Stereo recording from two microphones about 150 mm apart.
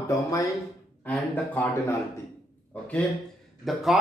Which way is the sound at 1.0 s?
10° left (ahead or behind).